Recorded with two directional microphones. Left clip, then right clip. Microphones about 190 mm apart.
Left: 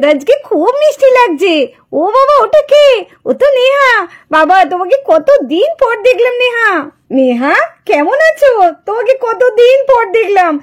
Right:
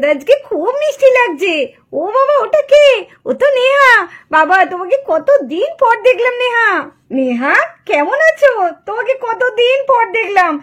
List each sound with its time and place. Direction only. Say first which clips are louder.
0.0 s a child's voice: left 2 dB; 35° left (ahead or behind)
7.2 s a woman's voice: left 3 dB; 45° left (ahead or behind)